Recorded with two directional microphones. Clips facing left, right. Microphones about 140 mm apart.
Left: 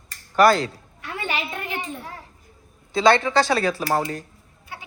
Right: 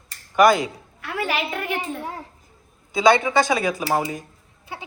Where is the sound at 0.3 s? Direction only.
15° right (ahead or behind).